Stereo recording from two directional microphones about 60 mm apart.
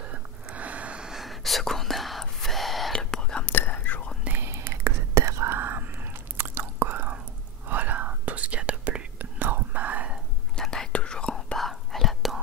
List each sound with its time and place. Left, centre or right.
0.1 s a sound: right
1.0 s whispering: centre
2.9 s whispering: centre
3.4 s whispering: left
4.5 s whispering: right
5.6 s whispering: right
10.6 s whispering: centre
11.5 s whispering: centre